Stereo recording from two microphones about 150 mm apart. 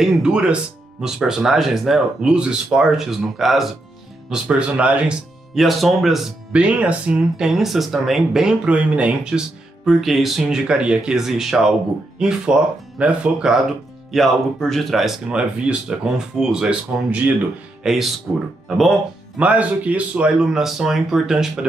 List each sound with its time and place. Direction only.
0.0 s speech: 5° right (ahead or behind)